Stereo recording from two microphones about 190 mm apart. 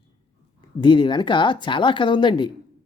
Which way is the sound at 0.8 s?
25° left (ahead or behind).